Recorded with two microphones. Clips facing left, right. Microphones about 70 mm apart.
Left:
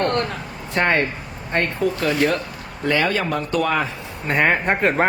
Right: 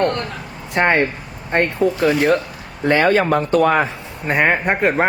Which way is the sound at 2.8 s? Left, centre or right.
Right.